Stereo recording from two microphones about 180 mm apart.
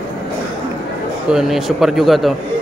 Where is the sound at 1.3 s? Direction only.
Centre (ahead or behind).